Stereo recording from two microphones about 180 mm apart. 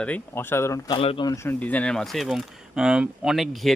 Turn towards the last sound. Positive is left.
turn(degrees=0)  # may be behind; listen again after turning